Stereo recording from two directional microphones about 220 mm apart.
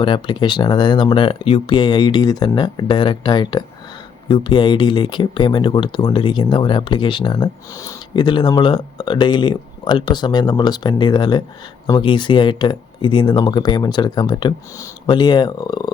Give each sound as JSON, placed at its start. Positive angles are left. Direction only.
{"t": 0.0, "sound": "speech", "side_deg": 20}